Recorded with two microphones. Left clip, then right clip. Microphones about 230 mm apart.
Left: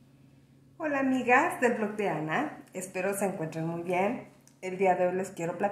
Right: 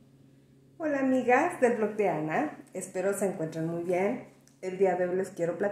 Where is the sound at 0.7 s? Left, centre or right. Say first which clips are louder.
Right 1 dB; centre.